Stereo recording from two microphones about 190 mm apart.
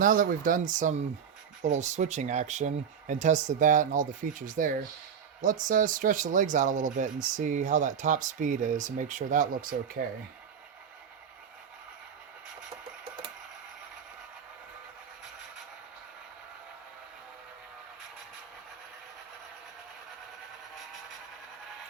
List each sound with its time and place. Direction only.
0.0 s speech: 45° right (ahead or behind)